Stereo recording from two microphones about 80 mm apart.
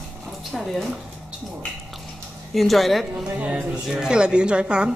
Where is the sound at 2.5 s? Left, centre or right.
Centre.